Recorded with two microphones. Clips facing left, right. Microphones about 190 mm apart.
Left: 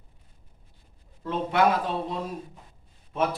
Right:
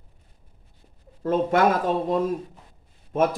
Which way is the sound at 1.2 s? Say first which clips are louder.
Right 4 dB; 45° right (ahead or behind).